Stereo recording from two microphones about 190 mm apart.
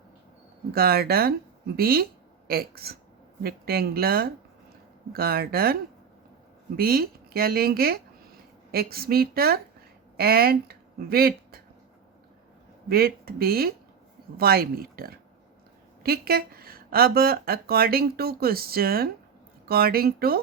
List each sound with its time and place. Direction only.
0.7 s speech: 55° right (ahead or behind)
6.7 s speech: 50° right (ahead or behind)
12.9 s speech: 55° right (ahead or behind)